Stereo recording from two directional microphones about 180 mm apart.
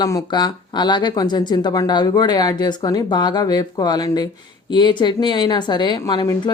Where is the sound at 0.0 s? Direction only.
20° left (ahead or behind).